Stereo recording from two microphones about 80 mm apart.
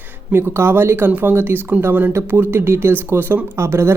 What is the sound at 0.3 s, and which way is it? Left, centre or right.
Speech, right.